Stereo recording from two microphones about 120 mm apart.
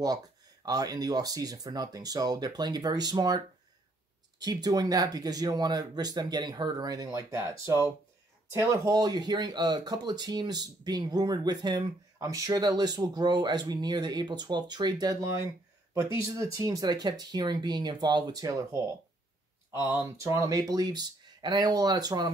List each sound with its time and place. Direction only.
0.7 s speech: 35° right (ahead or behind)
15.1 s speech: 25° right (ahead or behind)